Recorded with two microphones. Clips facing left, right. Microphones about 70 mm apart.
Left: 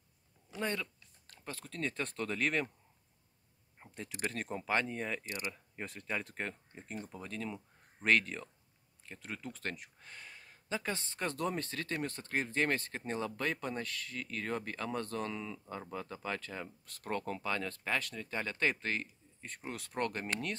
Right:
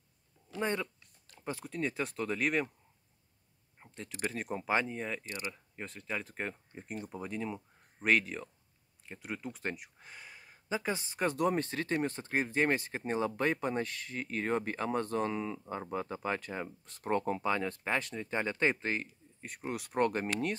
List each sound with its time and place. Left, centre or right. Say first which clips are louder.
0.6 s speech: right 3 dB; right
3.8 s speech: right 2 dB; centre
6.7 s speech: right 3 dB; centre